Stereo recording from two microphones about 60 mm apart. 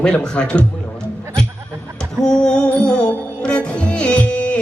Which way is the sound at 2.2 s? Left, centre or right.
Centre.